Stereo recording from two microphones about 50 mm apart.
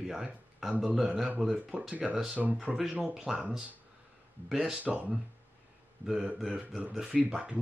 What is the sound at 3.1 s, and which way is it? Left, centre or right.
Speech, centre.